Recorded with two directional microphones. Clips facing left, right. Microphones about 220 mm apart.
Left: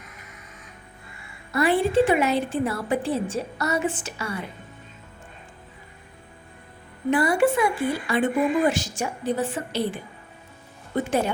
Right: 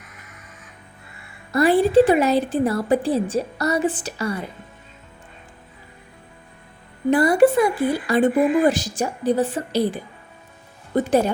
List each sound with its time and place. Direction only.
1.5 s speech: 35° right (ahead or behind)
7.1 s speech: 40° right (ahead or behind)